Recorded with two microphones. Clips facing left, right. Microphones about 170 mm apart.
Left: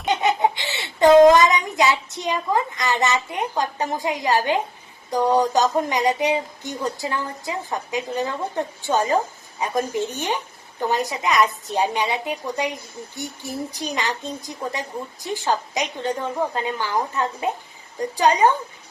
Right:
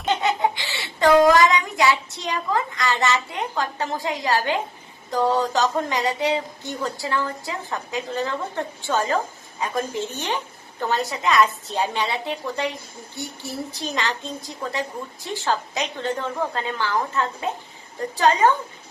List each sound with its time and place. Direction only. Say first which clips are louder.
0.0 s a child's voice: left 2 dB; 15° left (ahead or behind)